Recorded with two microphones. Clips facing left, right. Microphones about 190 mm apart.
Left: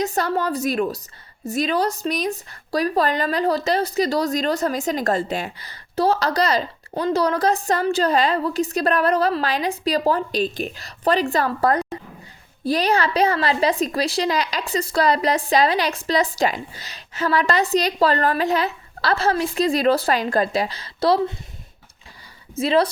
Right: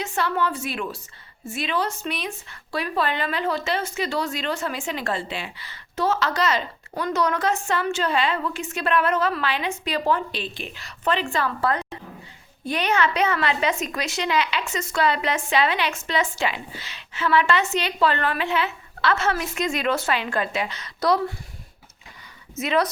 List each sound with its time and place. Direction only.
0.0 s speech: 40° left (ahead or behind)
22.5 s speech: 30° left (ahead or behind)